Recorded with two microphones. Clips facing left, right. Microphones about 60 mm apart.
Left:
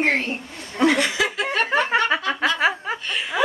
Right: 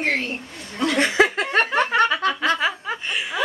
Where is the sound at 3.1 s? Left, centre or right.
Centre.